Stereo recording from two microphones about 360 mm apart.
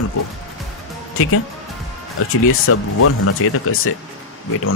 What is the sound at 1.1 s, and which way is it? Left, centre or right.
Speech, left.